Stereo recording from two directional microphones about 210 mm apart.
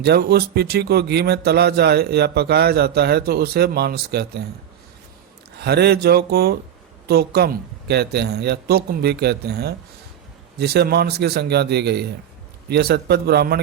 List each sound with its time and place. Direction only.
0.0 s a man's voice: 50° right (ahead or behind)
5.5 s a man's voice: 50° right (ahead or behind)